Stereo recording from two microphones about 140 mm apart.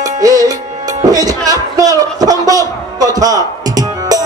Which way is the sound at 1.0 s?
25° right (ahead or behind).